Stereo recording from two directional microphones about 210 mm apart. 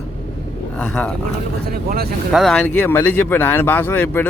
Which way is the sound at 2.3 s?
Centre (ahead or behind).